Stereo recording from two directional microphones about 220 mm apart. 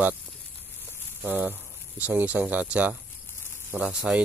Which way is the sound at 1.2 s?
10° right (ahead or behind).